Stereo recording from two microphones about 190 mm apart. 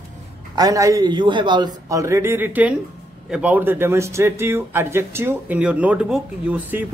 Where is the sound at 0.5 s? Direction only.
15° right (ahead or behind).